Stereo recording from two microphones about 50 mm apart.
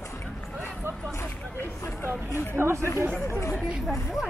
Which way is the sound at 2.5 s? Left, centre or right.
Right.